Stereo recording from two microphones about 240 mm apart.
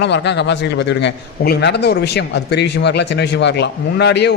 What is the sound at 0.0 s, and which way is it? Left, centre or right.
A man's voice, left.